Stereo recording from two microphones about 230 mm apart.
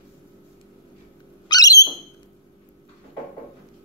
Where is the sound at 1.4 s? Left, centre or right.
Centre.